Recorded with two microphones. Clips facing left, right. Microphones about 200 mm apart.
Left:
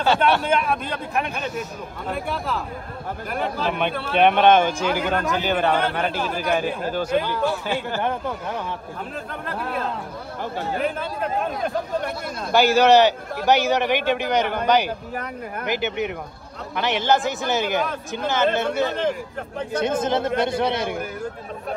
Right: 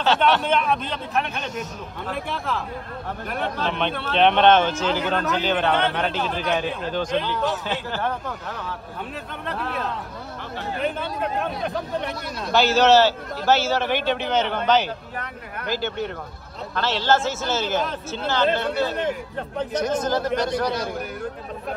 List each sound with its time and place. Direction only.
0.0 s speech: 10° left (ahead or behind)
9.5 s speech: centre (ahead or behind)
12.5 s speech: 10° left (ahead or behind)
20.0 s speech: 25° left (ahead or behind)